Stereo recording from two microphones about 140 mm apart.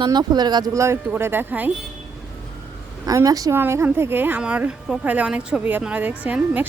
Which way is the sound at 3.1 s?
25° right (ahead or behind).